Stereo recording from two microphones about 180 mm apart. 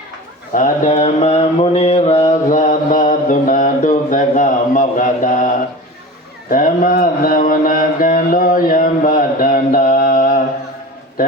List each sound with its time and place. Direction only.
0.5 s mantra: 45° left (ahead or behind)
6.5 s mantra: 50° left (ahead or behind)